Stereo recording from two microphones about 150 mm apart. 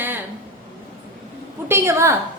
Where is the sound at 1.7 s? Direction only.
15° right (ahead or behind).